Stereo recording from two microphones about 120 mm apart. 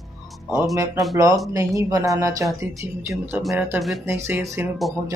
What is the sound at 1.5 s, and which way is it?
Speech, 25° right (ahead or behind).